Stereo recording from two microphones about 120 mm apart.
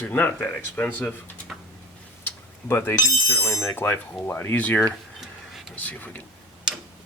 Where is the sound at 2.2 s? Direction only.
20° left (ahead or behind).